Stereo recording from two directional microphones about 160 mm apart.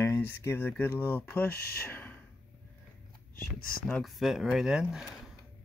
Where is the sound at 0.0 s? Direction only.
15° left (ahead or behind).